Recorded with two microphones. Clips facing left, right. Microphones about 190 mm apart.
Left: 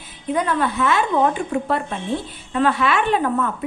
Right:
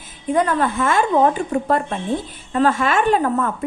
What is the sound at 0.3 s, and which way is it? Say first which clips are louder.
A woman's voice: right 3 dB; 45° right (ahead or behind).